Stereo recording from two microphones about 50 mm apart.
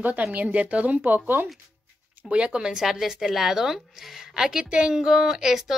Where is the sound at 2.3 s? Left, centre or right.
Right.